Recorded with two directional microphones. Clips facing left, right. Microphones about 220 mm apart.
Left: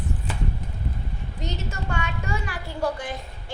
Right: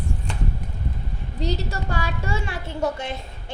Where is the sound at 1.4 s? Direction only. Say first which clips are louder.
Right 6 dB; 35° right (ahead or behind).